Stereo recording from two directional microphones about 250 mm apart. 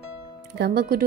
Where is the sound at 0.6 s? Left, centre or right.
Right.